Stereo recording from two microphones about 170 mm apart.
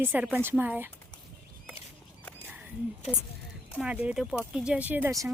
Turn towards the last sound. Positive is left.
turn(degrees=-15)  # may be behind; listen again after turning